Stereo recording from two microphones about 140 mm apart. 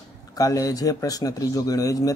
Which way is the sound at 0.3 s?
25° left (ahead or behind).